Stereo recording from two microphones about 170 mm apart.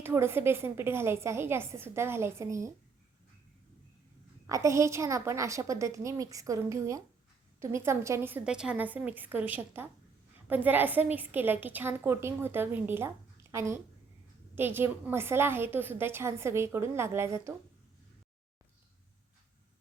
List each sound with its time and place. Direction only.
0.0 s a woman's voice: 15° right (ahead or behind)
4.4 s a woman's voice: 20° right (ahead or behind)